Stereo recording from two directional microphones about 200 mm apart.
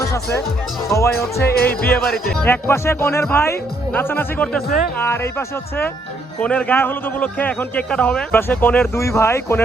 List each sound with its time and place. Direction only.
0.0 s a man's voice: 15° left (ahead or behind)
1.1 s music: 50° left (ahead or behind)
1.9 s a man's voice: 5° left (ahead or behind)